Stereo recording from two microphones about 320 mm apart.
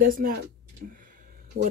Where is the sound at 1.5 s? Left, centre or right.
Right.